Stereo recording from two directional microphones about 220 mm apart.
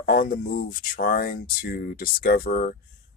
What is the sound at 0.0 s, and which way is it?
Speech, 40° left (ahead or behind).